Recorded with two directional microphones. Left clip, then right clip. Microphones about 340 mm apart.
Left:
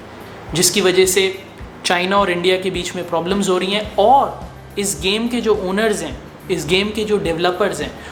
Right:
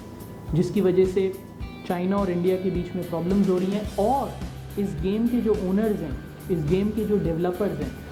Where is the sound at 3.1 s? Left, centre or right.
Centre.